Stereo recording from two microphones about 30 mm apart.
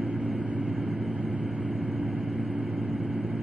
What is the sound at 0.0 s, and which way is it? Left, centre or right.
Vehicle, right.